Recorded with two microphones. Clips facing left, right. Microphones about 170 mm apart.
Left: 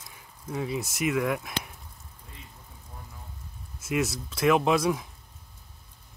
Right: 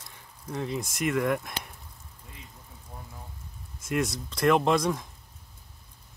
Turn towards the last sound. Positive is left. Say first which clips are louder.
# even
turn(degrees=5)  # may be behind; listen again after turning